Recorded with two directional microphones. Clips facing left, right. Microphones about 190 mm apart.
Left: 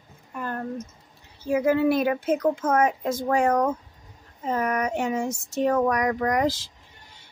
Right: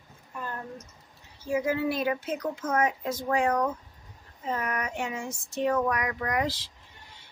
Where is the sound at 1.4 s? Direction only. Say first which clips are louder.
Left 6 dB; 60° left (ahead or behind).